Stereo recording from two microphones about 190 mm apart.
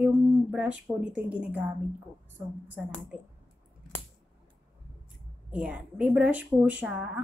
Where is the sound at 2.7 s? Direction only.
5° right (ahead or behind).